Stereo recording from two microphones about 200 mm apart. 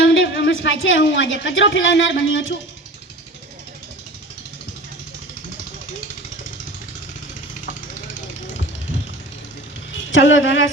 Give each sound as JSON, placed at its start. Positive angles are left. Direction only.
{"t": 0.0, "sound": "a sound", "side_deg": 65}
{"t": 0.6, "sound": "a woman's voice", "side_deg": 70}
{"t": 10.1, "sound": "a woman's voice", "side_deg": 70}